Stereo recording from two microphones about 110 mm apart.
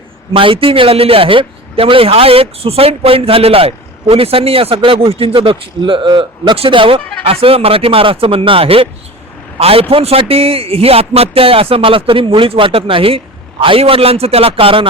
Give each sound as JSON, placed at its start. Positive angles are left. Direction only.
{"t": 0.3, "sound": "a man's voice", "side_deg": -55}